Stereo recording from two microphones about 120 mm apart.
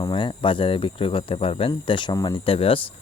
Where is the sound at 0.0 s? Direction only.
40° left (ahead or behind).